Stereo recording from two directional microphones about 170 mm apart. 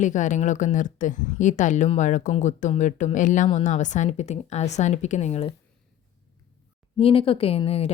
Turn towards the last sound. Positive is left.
turn(degrees=35)  # may be behind; listen again after turning